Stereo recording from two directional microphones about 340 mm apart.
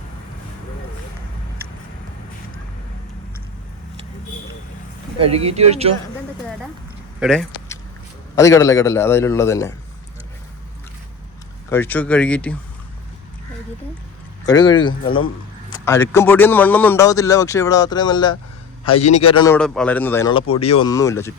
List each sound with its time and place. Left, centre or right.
5.2 s speech: centre
7.2 s a man's voice: centre
11.7 s speech: centre
14.4 s a man's voice: centre